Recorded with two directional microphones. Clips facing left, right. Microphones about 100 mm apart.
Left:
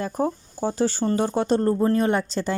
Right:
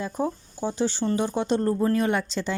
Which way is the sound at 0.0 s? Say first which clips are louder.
Left 3 dB; 40° left (ahead or behind).